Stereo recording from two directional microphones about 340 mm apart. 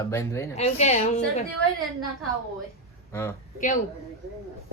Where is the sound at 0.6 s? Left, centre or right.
Centre.